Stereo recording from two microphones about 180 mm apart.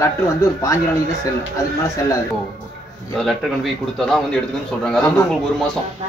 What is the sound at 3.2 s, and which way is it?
A man's voice, centre (ahead or behind).